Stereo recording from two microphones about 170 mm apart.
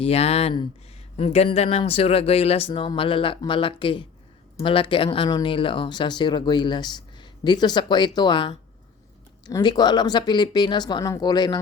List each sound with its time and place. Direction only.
0.0 s speech: 35° left (ahead or behind)